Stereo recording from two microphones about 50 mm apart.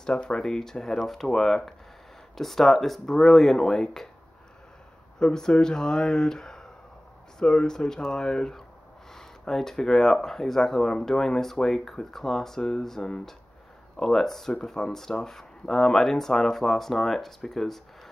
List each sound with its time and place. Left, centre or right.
0.0 s speech: centre
5.2 s speech: centre